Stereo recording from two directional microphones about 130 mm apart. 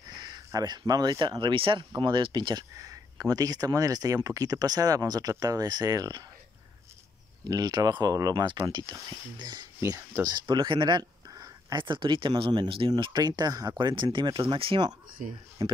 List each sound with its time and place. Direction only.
0.2 s speech: 30° right (ahead or behind)
7.4 s speech: 30° right (ahead or behind)
15.2 s speech: 90° right
15.6 s speech: 50° right (ahead or behind)